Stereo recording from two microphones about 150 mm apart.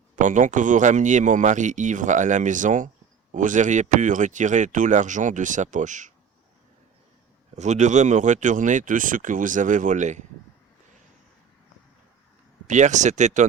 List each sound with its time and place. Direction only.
0.2 s speech: 55° right (ahead or behind)
7.5 s speech: 50° right (ahead or behind)
12.6 s speech: 55° right (ahead or behind)